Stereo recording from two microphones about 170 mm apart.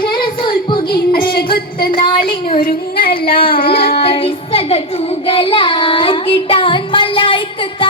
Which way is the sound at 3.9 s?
35° left (ahead or behind).